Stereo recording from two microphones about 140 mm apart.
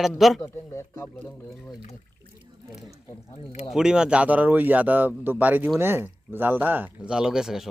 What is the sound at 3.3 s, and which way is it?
Speech, 55° left (ahead or behind).